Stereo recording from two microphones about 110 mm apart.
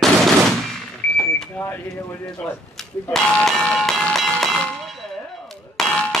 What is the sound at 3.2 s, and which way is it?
Music, 5° left (ahead or behind).